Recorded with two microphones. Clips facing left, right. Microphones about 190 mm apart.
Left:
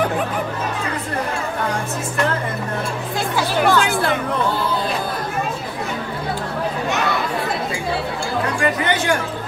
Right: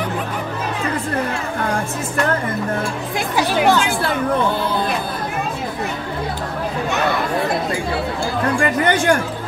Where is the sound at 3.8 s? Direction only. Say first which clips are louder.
Left 1 dB; 50° left (ahead or behind).